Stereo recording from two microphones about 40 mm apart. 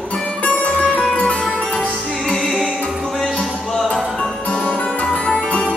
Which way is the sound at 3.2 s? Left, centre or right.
Centre.